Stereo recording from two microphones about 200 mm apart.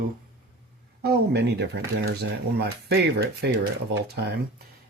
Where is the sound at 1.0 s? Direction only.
55° right (ahead or behind).